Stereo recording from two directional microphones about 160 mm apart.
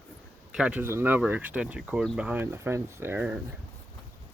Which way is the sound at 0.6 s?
10° right (ahead or behind).